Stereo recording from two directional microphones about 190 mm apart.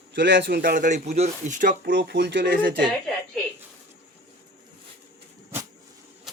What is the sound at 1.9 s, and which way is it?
Speech, 60° right (ahead or behind).